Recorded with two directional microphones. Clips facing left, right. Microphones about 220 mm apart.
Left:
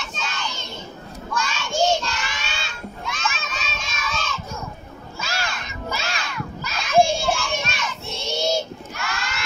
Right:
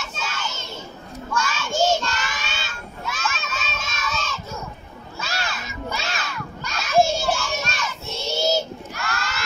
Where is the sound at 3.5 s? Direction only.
5° right (ahead or behind).